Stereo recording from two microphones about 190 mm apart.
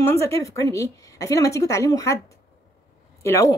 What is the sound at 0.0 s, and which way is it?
A woman's voice, 15° left (ahead or behind).